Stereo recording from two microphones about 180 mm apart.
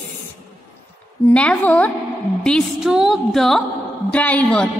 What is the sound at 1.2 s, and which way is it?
A woman's voice, 10° left (ahead or behind).